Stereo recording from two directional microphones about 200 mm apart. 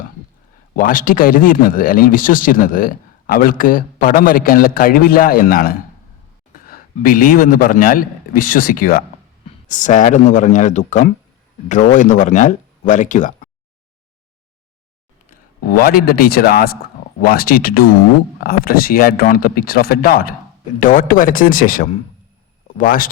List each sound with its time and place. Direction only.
0.8 s a man's voice: 45° left (ahead or behind)
15.3 s speech: 45° left (ahead or behind)